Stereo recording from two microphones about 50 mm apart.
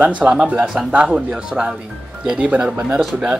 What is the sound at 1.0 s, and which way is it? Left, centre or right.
Speech, centre.